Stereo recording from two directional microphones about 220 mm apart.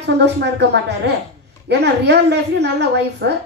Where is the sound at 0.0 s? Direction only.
50° right (ahead or behind).